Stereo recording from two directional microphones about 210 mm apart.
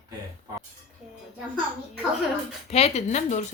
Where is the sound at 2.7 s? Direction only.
30° left (ahead or behind).